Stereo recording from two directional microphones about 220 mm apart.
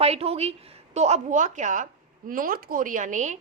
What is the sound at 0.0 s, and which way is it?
A woman's voice, 30° right (ahead or behind).